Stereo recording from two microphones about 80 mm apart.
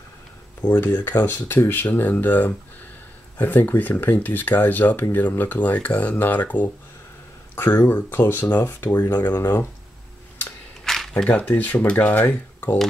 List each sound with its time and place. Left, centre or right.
0.6 s speech: left
10.8 s a sound: centre
11.2 s speech: centre